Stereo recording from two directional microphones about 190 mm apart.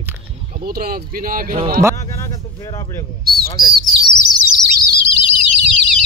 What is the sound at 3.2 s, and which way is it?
Speech, 55° right (ahead or behind).